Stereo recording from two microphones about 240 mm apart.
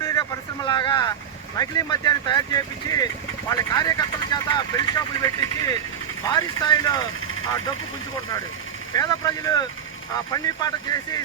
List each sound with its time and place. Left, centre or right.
0.0 s vehicle: centre
1.5 s speech: centre
8.9 s speech: centre